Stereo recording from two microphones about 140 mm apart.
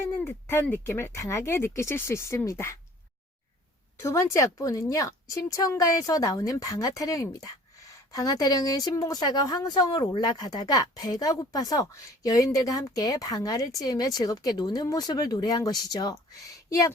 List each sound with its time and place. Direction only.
0.0 s speech: 15° left (ahead or behind)
4.0 s a woman's voice: 25° left (ahead or behind)